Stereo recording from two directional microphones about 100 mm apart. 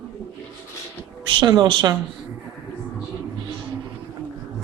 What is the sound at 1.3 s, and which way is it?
Speech, 50° right (ahead or behind).